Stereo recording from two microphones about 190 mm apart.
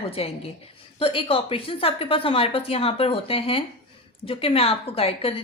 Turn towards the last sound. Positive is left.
turn(degrees=30)  # may be behind; listen again after turning